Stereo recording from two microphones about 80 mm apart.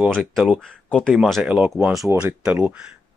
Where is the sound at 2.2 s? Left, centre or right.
Centre.